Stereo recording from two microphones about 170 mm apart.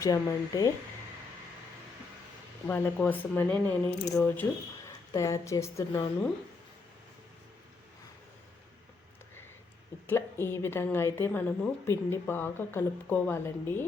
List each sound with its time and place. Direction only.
0.0 s speech: 20° left (ahead or behind)
2.6 s a woman's voice: 15° left (ahead or behind)
10.1 s a woman's voice: 15° left (ahead or behind)